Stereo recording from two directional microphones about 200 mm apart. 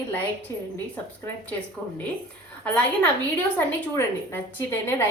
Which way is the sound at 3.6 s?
10° left (ahead or behind).